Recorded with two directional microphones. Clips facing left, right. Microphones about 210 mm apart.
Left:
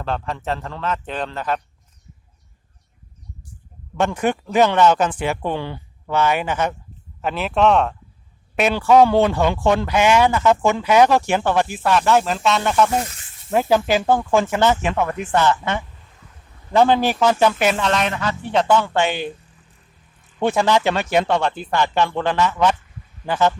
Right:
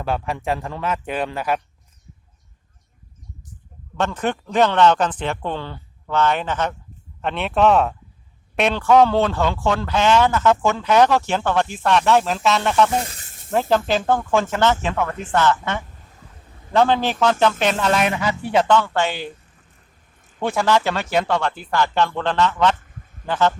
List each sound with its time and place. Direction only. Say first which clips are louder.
0.0 s speech: right 1 dB; 10° right (ahead or behind)
3.9 s speech: left 3 dB; 10° left (ahead or behind)
17.8 s speech: right 1 dB; 5° right (ahead or behind)
18.7 s speech: left 1 dB; 15° left (ahead or behind)
20.4 s speech: left 2 dB; 20° left (ahead or behind)